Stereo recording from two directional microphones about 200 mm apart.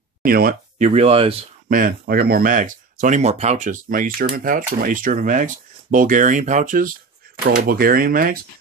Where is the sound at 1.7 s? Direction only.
45° right (ahead or behind).